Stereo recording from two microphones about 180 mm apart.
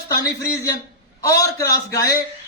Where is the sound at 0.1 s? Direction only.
20° left (ahead or behind).